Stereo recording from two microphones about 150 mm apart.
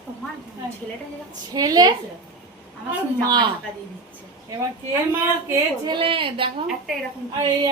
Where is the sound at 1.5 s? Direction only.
25° right (ahead or behind).